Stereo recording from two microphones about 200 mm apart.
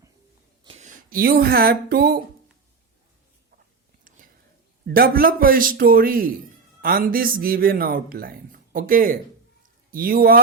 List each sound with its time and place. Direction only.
0.6 s speech: 30° right (ahead or behind); by 2.2 s 45° right (ahead or behind)
4.9 s speech: 50° right (ahead or behind)